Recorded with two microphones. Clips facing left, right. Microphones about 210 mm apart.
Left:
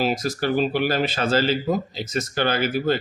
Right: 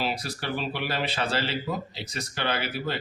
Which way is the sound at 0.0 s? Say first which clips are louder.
Left 8 dB; 45° left (ahead or behind).